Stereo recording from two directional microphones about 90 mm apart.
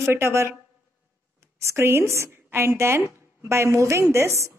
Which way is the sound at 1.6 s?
30° right (ahead or behind).